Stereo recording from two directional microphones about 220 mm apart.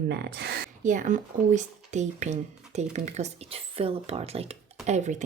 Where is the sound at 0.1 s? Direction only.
50° right (ahead or behind).